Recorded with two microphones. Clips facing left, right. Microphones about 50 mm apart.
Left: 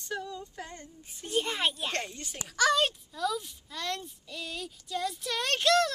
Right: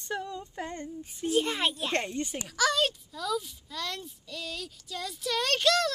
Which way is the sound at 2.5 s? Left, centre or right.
Centre.